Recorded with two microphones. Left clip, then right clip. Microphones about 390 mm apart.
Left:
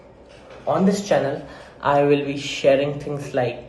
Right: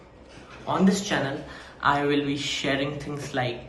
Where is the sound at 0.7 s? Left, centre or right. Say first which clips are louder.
Left 6 dB; centre.